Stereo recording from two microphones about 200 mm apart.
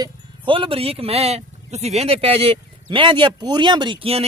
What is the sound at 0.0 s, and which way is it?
Speech, 25° right (ahead or behind).